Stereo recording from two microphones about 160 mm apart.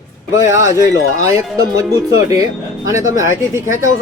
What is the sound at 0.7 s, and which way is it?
Speech, 50° left (ahead or behind).